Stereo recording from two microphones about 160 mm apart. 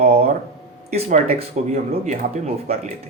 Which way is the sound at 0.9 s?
40° right (ahead or behind).